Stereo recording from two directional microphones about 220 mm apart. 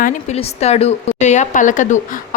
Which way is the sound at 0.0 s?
30° left (ahead or behind).